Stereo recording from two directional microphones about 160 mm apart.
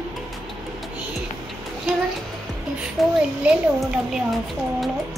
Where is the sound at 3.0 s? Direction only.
Centre (ahead or behind).